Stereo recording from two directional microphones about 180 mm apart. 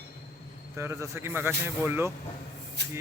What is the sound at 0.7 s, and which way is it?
Speech, 15° right (ahead or behind).